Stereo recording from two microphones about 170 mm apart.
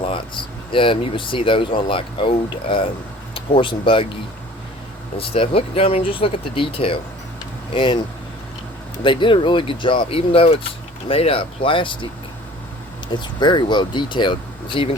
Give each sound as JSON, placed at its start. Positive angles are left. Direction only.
{"t": 0.0, "sound": "speech", "side_deg": 30}
{"t": 9.0, "sound": "speech", "side_deg": 30}
{"t": 13.1, "sound": "speech", "side_deg": 25}